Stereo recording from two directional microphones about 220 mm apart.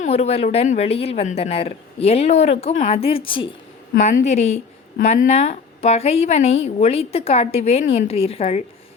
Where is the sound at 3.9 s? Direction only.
35° left (ahead or behind).